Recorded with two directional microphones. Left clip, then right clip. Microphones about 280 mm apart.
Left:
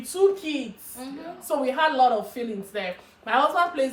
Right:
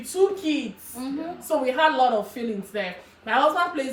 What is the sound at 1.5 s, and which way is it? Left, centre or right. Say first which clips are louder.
Speech: right 2 dB; centre.